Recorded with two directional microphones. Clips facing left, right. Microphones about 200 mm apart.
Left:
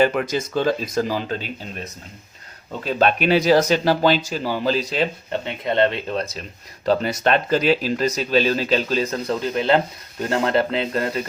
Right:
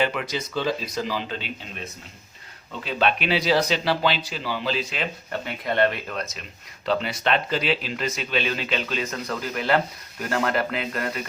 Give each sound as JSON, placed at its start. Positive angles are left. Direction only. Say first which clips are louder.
{"t": 0.0, "sound": "speech", "louder": "left 6 dB", "side_deg": 45}
{"t": 5.3, "sound": "speech", "louder": "left 4 dB", "side_deg": 25}